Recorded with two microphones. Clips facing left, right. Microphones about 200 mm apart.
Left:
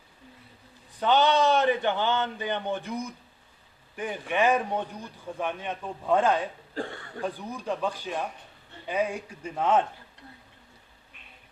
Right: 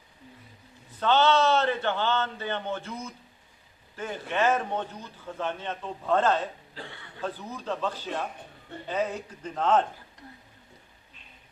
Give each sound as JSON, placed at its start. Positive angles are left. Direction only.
{"t": 0.9, "sound": "a man's voice", "side_deg": 15}
{"t": 6.7, "sound": "speech", "side_deg": 45}
{"t": 7.2, "sound": "a man's voice", "side_deg": 15}